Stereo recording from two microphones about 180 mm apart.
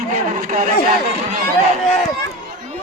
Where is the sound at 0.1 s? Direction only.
45° right (ahead or behind).